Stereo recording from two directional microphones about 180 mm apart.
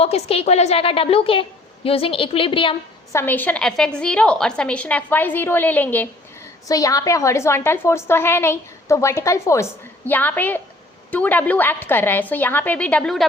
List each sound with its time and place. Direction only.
0.0 s a woman's voice: 35° left (ahead or behind)
3.1 s a woman's voice: 10° left (ahead or behind)